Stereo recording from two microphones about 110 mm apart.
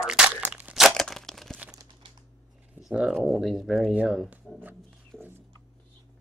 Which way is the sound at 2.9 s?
5° right (ahead or behind).